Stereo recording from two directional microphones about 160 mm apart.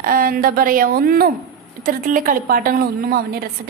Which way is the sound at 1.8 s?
60° right (ahead or behind).